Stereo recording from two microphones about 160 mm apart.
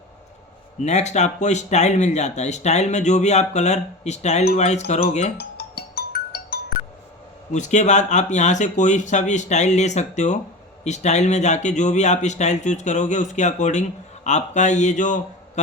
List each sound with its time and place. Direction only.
0.8 s speech: 45° left (ahead or behind)
5.4 s music: 80° left
7.5 s speech: 50° left (ahead or behind)